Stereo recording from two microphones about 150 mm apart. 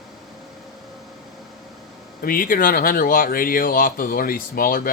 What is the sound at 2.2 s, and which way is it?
Speech, 70° left (ahead or behind).